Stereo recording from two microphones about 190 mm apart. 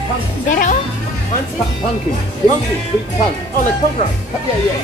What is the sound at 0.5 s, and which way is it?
Speech, 45° left (ahead or behind).